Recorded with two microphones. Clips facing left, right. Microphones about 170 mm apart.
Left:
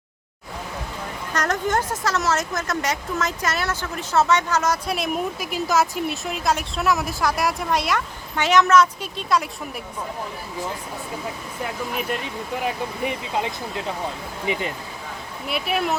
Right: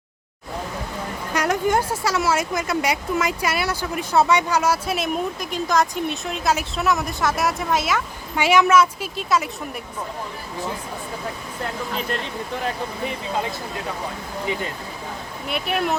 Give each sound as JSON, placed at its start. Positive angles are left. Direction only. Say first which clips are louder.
{"t": 1.3, "sound": "speech", "louder": "right 3 dB", "side_deg": -10}
{"t": 11.6, "sound": "speech", "louder": "even", "side_deg": 10}
{"t": 15.4, "sound": "speech", "louder": "even", "side_deg": 0}